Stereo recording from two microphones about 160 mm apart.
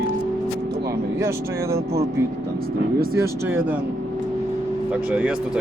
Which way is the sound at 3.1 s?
15° right (ahead or behind).